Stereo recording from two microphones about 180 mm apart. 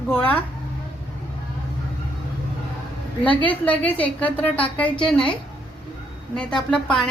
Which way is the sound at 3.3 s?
30° left (ahead or behind).